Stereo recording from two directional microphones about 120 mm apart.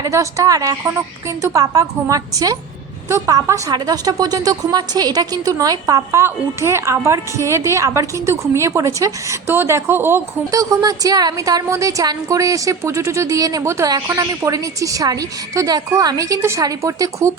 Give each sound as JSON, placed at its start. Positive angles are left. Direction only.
{"t": 0.0, "sound": "a woman's voice", "side_deg": -25}